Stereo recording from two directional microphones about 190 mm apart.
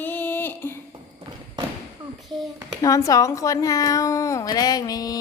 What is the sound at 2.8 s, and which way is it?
A woman's voice, 15° left (ahead or behind).